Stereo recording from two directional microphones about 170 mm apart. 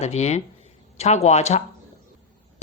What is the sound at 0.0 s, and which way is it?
Speech, 40° left (ahead or behind).